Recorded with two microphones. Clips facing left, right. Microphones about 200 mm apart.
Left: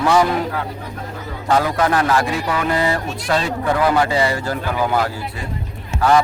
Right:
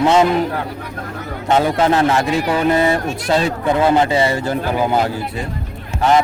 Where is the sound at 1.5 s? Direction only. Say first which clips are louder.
Right 3 dB; 25° right (ahead or behind).